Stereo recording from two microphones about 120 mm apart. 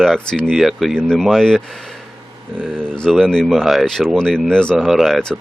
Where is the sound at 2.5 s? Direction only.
15° right (ahead or behind).